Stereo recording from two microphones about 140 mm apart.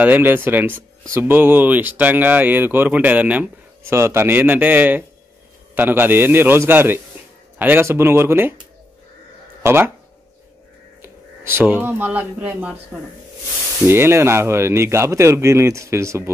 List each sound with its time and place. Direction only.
0.0 s speech: 15° right (ahead or behind)
9.6 s speech: 15° right (ahead or behind)
11.0 s speech: 15° right (ahead or behind)
13.8 s speech: 15° right (ahead or behind)